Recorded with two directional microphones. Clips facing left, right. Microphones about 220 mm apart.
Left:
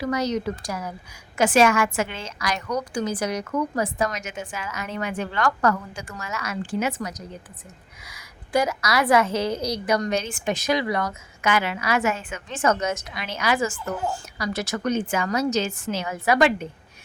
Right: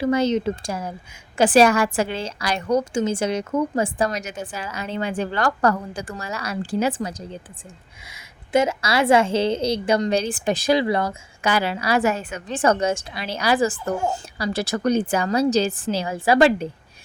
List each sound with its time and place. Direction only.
0.0 s a woman's voice: 25° right (ahead or behind)